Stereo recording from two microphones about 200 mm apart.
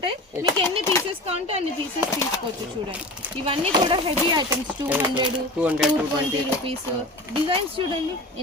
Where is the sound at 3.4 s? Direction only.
30° right (ahead or behind).